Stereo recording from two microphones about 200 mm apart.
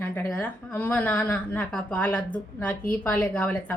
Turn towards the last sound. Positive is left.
turn(degrees=5)  # may be behind; listen again after turning